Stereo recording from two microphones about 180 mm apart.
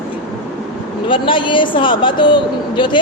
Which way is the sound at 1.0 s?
30° left (ahead or behind).